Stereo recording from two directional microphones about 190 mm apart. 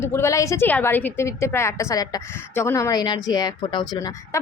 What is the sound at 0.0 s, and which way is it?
A woman's voice, 15° left (ahead or behind).